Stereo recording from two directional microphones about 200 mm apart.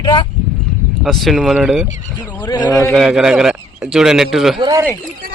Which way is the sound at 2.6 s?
15° left (ahead or behind).